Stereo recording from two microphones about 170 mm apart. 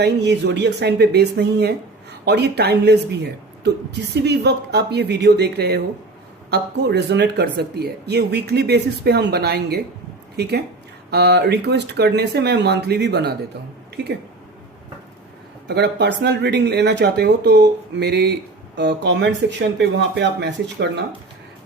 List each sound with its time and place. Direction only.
0.0 s speech: 90° right
15.6 s speech: 80° right